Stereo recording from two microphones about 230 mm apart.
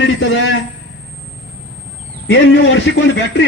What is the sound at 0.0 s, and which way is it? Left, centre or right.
Speech, left.